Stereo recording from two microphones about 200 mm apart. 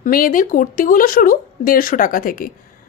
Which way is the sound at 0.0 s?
45° left (ahead or behind).